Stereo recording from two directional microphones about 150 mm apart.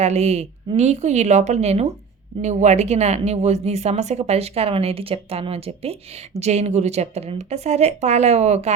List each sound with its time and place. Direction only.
0.0 s speech: 45° right (ahead or behind)